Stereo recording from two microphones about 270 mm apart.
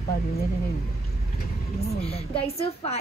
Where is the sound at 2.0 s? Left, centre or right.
Left.